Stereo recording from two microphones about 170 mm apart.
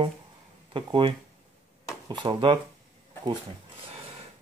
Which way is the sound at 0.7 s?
30° right (ahead or behind).